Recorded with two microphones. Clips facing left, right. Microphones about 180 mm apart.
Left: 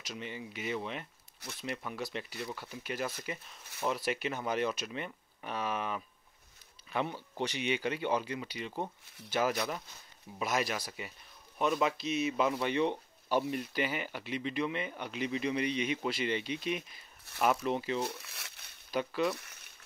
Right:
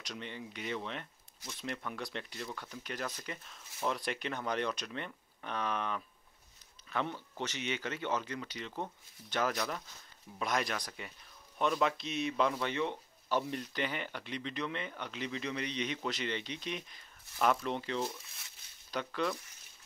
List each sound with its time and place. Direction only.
0.0 s speech: 5° left (ahead or behind)
12.5 s speech: 20° left (ahead or behind)
18.0 s crumpling: 75° left (ahead or behind)
18.9 s speech: 10° left (ahead or behind)
19.3 s a sound: 70° left (ahead or behind)